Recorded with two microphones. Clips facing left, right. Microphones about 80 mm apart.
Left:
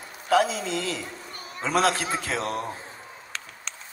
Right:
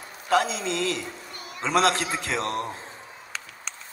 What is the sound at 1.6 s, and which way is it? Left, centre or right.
A man's voice, centre.